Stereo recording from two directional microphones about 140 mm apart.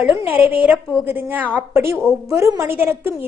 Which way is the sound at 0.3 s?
10° right (ahead or behind).